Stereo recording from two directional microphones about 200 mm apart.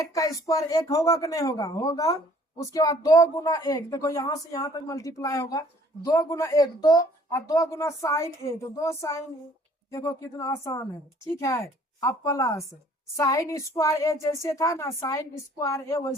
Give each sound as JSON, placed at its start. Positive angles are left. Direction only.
{"t": 0.0, "sound": "speech", "side_deg": 15}